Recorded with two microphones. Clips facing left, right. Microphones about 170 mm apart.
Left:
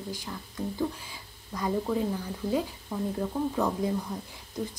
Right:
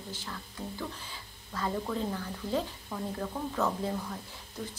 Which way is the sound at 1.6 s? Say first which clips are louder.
Left 4 dB; 15° left (ahead or behind).